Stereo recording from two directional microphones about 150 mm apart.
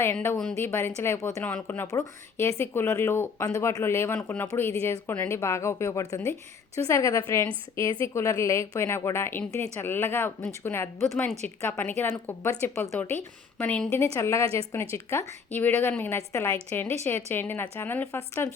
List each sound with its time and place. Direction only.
0.0 s speech: 15° left (ahead or behind)